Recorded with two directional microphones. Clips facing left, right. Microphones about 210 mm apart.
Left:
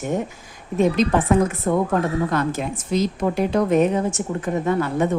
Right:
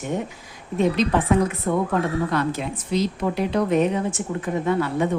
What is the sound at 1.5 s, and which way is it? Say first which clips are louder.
A woman's voice: left 2 dB; 45° left (ahead or behind).